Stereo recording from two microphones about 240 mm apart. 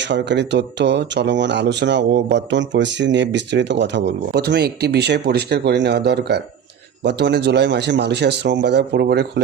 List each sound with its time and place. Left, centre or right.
0.0 s speech: right